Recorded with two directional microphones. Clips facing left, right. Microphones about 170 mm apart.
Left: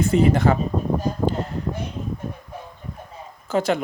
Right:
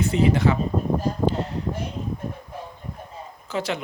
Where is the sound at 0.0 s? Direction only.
50° left (ahead or behind).